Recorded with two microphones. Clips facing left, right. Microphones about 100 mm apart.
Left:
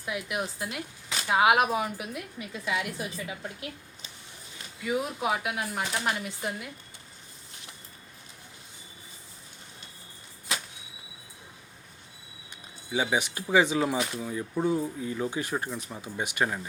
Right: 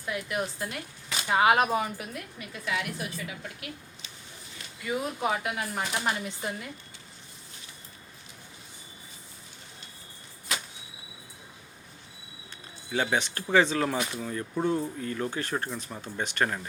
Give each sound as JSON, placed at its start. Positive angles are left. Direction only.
{"t": 0.0, "sound": "speech", "side_deg": 10}
{"t": 2.1, "sound": "a woman's voice", "side_deg": 20}
{"t": 4.8, "sound": "speech", "side_deg": 5}
{"t": 12.9, "sound": "speech", "side_deg": 10}